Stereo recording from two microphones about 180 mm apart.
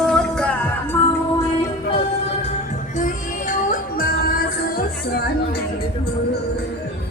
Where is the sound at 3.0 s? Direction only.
45° left (ahead or behind).